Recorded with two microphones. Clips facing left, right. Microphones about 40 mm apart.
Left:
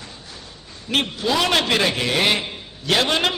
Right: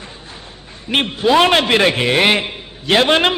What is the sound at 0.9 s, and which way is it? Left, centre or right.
A man's voice, right.